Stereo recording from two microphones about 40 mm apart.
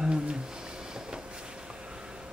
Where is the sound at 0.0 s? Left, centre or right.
Right.